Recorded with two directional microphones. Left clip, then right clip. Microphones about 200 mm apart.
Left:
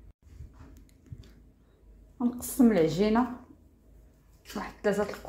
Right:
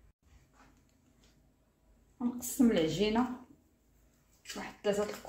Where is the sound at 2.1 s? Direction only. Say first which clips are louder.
Left 5 dB; 30° left (ahead or behind).